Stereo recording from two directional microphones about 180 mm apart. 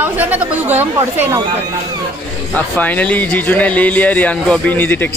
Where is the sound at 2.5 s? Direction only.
10° left (ahead or behind).